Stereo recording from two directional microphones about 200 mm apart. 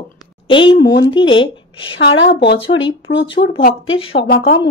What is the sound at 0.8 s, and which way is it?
Speech, 60° left (ahead or behind).